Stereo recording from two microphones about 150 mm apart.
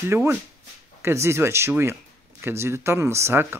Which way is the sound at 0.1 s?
15° right (ahead or behind).